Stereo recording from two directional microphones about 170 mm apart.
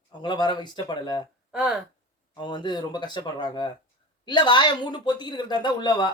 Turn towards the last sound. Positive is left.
turn(degrees=25)  # may be behind; listen again after turning